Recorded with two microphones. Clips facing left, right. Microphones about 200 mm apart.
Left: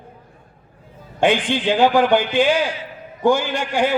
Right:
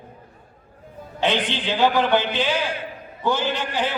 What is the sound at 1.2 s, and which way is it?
Speech, 50° left (ahead or behind).